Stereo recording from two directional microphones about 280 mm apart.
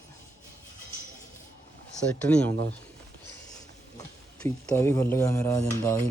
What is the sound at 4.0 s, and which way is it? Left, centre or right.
A man's voice, centre.